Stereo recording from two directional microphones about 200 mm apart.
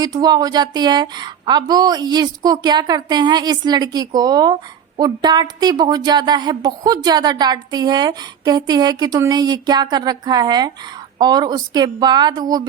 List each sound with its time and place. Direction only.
0.0 s a woman's voice: 20° right (ahead or behind)